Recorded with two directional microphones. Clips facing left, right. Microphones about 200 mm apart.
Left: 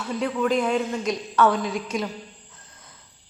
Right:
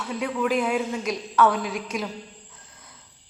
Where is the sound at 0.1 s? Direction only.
5° right (ahead or behind).